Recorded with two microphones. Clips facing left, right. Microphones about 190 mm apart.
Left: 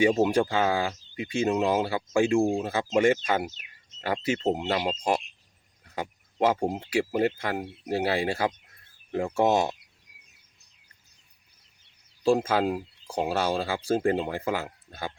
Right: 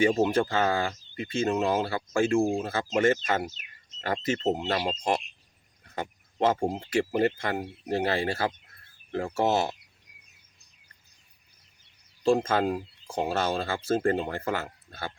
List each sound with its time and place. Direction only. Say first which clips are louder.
0.2 s speech: left 1 dB; 15° left (ahead or behind)
2.4 s speech: left 1 dB; centre (ahead or behind)
2.6 s speech: left 2 dB; 15° left (ahead or behind)
12.2 s speech: left 1 dB; 10° left (ahead or behind)